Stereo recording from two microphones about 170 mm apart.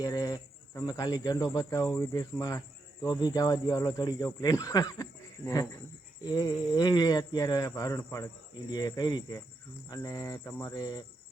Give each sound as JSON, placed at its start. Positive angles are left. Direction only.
{"t": 0.0, "sound": "speech", "side_deg": 20}